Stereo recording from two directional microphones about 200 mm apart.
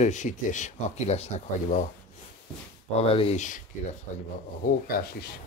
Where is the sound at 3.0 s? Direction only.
25° left (ahead or behind).